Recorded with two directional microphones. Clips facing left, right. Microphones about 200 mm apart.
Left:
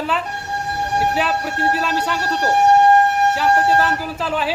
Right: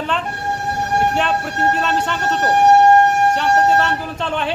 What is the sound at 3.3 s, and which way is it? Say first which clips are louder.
Speech: right 1 dB; 5° left (ahead or behind).